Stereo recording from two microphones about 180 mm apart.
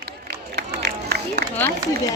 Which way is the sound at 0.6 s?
65° right (ahead or behind).